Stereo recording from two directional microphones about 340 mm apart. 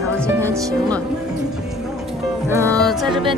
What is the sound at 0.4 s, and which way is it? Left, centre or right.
Speech, centre.